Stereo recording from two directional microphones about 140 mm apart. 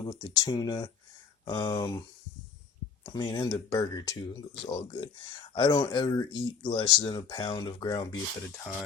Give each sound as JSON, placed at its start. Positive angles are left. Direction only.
{"t": 0.0, "sound": "speech", "side_deg": 30}
{"t": 3.0, "sound": "speech", "side_deg": 30}